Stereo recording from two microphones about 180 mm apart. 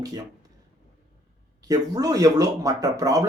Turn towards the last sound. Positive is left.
turn(degrees=-20)  # may be behind; listen again after turning